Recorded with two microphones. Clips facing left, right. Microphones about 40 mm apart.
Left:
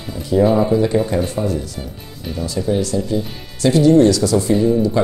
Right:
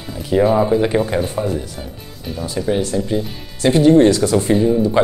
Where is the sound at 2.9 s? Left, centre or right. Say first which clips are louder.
Even; right.